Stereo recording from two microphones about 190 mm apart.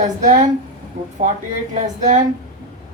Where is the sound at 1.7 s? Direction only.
40° right (ahead or behind).